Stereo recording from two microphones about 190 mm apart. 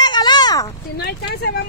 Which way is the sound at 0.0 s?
20° left (ahead or behind).